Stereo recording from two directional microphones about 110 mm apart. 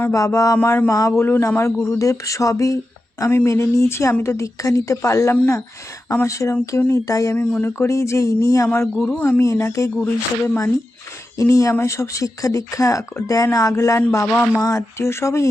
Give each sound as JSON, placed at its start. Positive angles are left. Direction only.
{"t": 0.0, "sound": "speech", "side_deg": 25}
{"t": 7.3, "sound": "speech", "side_deg": 20}
{"t": 9.0, "sound": "speech", "side_deg": 10}
{"t": 9.4, "sound": "speech", "side_deg": 25}